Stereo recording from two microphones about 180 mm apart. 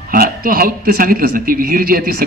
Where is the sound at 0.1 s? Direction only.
50° right (ahead or behind).